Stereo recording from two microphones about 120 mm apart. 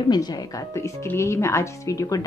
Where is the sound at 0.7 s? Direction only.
20° left (ahead or behind).